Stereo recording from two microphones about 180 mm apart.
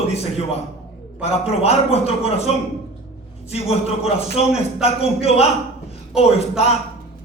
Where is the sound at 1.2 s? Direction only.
35° left (ahead or behind).